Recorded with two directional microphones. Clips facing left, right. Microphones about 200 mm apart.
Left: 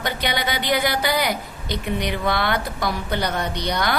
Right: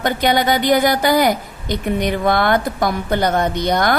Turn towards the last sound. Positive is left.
turn(degrees=-50)  # may be behind; listen again after turning